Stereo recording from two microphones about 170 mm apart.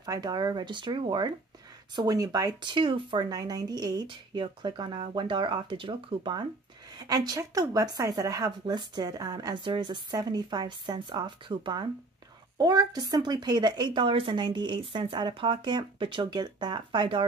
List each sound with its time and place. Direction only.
0.0 s speech: 20° right (ahead or behind)